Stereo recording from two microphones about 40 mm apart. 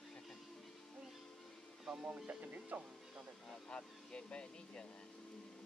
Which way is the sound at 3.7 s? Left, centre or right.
Left.